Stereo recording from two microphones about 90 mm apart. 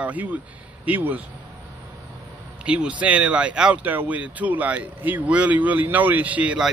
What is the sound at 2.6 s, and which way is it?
Speech, 15° right (ahead or behind).